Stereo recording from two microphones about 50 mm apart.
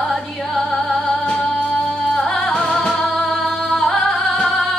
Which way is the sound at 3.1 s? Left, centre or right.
Centre.